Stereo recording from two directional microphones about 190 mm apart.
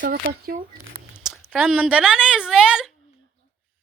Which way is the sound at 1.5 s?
5° right (ahead or behind).